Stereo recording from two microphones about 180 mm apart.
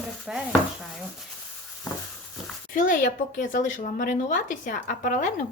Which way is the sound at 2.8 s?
50° left (ahead or behind).